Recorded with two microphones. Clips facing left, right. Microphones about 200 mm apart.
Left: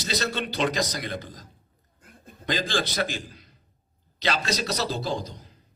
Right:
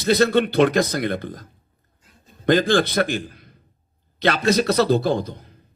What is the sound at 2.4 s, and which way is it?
A man's voice, 55° right (ahead or behind).